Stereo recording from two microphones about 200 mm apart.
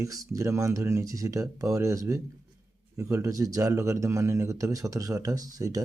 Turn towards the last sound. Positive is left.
turn(degrees=-15)  # may be behind; listen again after turning